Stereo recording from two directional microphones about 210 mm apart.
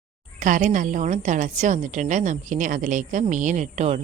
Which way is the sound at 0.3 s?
35° right (ahead or behind).